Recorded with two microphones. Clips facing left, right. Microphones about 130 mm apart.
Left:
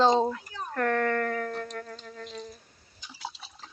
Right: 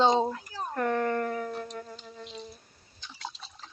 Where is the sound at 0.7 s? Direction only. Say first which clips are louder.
Left 1 dB; 15° right (ahead or behind).